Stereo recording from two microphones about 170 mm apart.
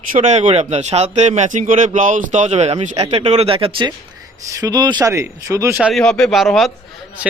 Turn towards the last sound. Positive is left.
turn(degrees=0)  # may be behind; listen again after turning